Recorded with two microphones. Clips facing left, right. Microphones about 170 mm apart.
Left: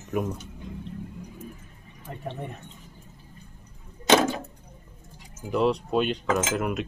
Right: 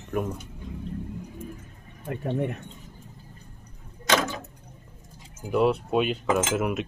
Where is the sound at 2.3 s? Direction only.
65° right (ahead or behind).